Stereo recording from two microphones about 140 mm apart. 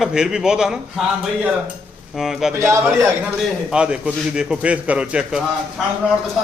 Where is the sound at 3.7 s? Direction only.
5° right (ahead or behind).